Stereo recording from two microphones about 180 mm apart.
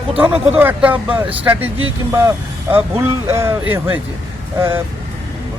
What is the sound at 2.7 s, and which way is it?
Speech, 15° right (ahead or behind).